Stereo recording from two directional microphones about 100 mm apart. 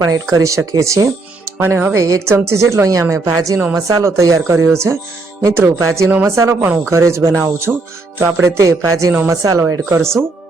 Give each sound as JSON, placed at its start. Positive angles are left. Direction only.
{"t": 0.0, "sound": "a woman's voice", "side_deg": -35}
{"t": 7.7, "sound": "music", "side_deg": -5}
{"t": 8.2, "sound": "a woman's voice", "side_deg": -30}